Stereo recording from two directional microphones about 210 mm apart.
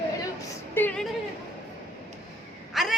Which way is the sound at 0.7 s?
5° left (ahead or behind).